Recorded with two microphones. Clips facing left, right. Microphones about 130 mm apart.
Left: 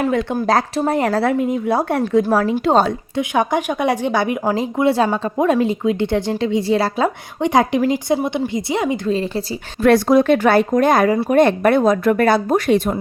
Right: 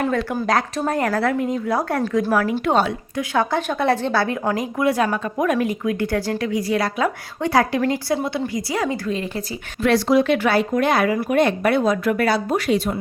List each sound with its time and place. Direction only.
0.0 s speech: 15° left (ahead or behind)
3.2 s speech: 15° left (ahead or behind)
9.8 s a woman's voice: 50° left (ahead or behind)